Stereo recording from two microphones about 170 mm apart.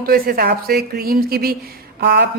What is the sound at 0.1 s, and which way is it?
A woman's voice, 60° right (ahead or behind).